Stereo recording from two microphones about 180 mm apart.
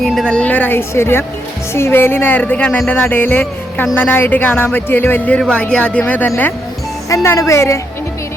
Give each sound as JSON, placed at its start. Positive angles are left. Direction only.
{"t": 0.0, "sound": "speech", "side_deg": 0}